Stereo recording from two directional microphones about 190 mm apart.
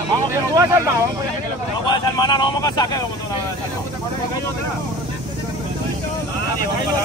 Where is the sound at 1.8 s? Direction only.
25° left (ahead or behind).